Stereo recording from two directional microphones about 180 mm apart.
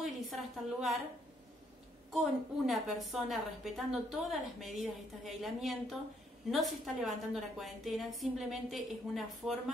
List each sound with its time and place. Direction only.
0.0 s a woman's voice: centre (ahead or behind)
2.0 s a woman's voice: centre (ahead or behind)